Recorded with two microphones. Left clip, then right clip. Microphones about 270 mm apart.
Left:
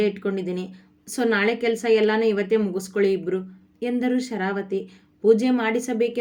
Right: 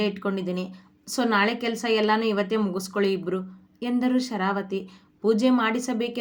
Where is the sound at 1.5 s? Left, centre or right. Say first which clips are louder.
Left 5 dB; right.